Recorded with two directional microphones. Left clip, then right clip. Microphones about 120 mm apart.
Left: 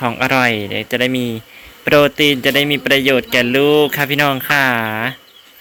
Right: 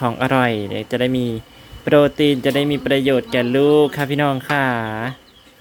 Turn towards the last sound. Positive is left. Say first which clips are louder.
# left 5 dB
turn(degrees=-15)  # may be behind; listen again after turning